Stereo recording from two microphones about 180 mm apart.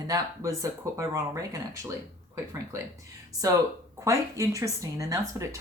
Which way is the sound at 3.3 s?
20° right (ahead or behind).